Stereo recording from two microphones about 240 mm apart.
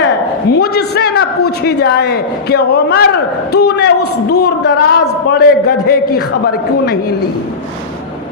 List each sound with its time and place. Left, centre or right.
0.5 s a woman's voice: left